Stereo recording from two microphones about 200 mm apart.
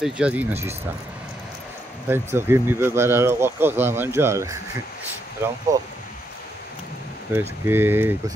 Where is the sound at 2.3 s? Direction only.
10° right (ahead or behind).